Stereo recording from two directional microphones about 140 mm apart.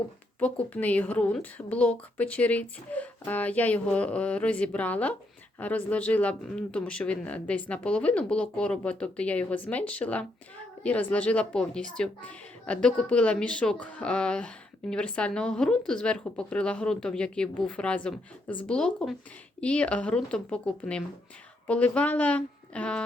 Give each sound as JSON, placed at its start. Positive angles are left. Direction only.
{"t": 0.3, "sound": "a woman's voice", "side_deg": 10}